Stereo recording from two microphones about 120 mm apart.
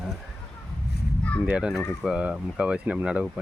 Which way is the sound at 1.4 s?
10° right (ahead or behind).